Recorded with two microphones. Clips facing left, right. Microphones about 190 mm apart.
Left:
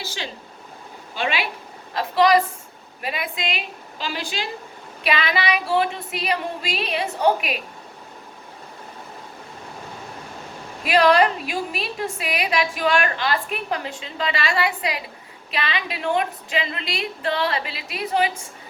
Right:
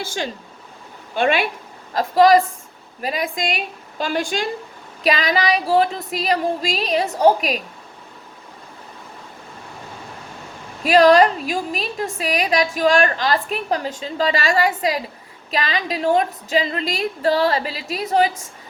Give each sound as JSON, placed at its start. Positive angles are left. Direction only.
{"t": 0.0, "sound": "a woman's voice", "side_deg": -50}
{"t": 1.9, "sound": "a woman's voice", "side_deg": -40}
{"t": 10.8, "sound": "a woman's voice", "side_deg": -40}